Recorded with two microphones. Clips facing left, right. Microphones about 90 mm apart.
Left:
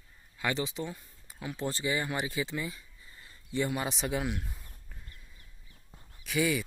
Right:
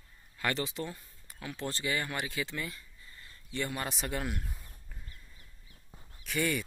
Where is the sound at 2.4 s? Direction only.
15° left (ahead or behind).